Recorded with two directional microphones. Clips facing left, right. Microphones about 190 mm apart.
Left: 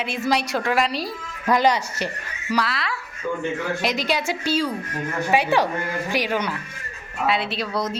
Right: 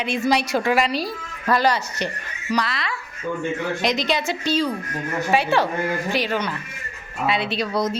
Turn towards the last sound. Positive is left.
turn(degrees=0)  # may be behind; listen again after turning